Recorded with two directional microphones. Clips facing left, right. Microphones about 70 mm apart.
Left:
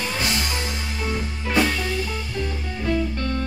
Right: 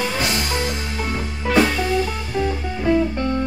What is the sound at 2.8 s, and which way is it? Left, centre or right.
Music, right.